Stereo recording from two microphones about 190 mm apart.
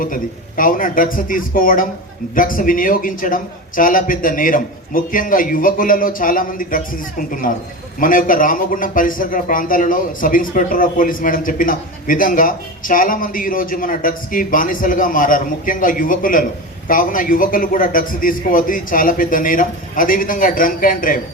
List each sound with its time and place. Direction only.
0.0 s a man's voice: 45° left (ahead or behind)